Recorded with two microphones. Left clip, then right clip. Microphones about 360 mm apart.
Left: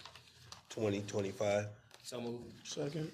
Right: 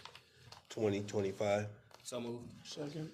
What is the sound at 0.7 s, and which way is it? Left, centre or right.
A man's voice, centre.